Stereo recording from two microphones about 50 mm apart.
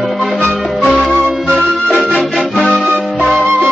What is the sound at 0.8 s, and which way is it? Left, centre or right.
Music, centre.